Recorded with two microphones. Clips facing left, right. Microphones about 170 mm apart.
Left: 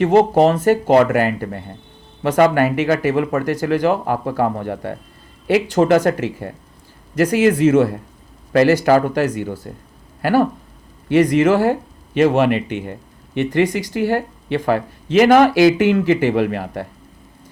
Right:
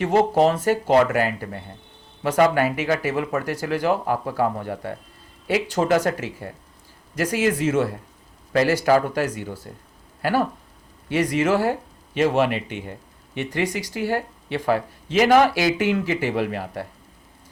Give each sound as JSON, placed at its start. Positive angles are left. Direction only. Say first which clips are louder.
{"t": 0.0, "sound": "speech", "louder": "left 5 dB", "side_deg": 60}